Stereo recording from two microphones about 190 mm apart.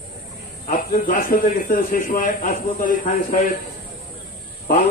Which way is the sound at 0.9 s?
45° left (ahead or behind).